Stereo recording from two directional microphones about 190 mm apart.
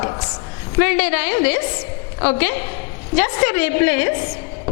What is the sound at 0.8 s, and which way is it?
A woman's voice, 10° left (ahead or behind).